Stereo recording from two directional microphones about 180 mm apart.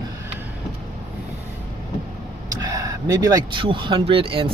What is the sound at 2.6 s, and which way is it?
Speech, 20° right (ahead or behind).